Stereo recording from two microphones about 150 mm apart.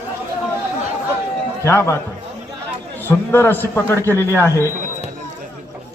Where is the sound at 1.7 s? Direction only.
20° left (ahead or behind).